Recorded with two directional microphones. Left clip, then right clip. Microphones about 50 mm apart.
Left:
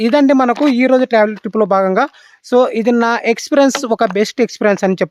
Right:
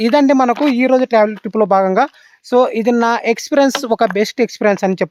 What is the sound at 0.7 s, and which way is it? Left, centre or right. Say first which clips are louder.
Speech: even; left.